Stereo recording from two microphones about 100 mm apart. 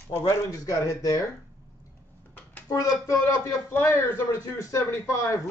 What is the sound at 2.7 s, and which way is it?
A man's voice, 35° left (ahead or behind).